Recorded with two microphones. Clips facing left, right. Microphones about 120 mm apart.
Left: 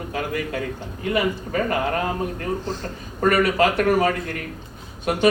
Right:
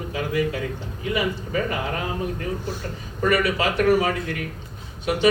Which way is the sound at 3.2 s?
50° left (ahead or behind).